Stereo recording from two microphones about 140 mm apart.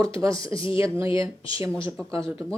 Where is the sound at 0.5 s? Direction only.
40° left (ahead or behind).